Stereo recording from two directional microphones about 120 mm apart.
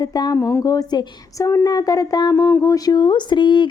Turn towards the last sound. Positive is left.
turn(degrees=40)  # may be behind; listen again after turning